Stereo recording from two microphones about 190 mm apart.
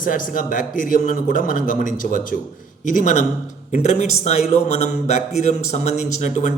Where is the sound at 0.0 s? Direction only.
45° left (ahead or behind).